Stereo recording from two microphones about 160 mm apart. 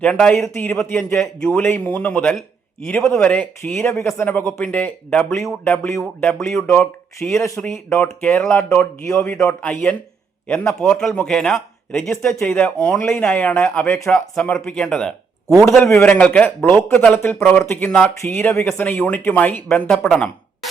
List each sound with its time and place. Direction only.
0.0 s speech: 5° left (ahead or behind)
10.8 s speech: 5° left (ahead or behind)